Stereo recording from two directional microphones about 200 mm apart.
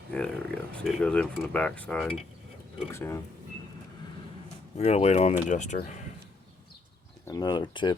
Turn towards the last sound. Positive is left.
turn(degrees=25)  # may be behind; listen again after turning